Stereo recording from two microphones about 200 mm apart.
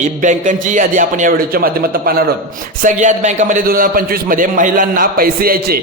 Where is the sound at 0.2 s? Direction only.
40° right (ahead or behind).